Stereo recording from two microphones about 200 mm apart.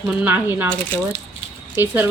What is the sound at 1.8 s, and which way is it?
Speech, 10° right (ahead or behind).